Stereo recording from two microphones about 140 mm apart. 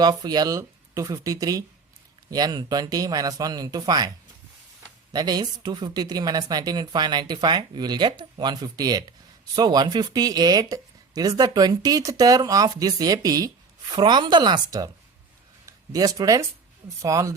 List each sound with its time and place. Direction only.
0.0 s speech: 30° right (ahead or behind)
5.1 s speech: 30° right (ahead or behind)